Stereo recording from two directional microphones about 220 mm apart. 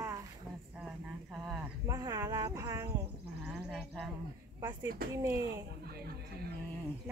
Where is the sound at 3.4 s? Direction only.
5° right (ahead or behind).